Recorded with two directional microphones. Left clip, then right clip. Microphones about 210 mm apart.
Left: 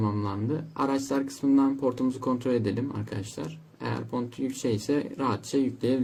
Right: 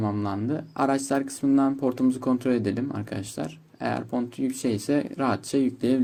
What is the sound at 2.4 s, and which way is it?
Speech, 15° right (ahead or behind).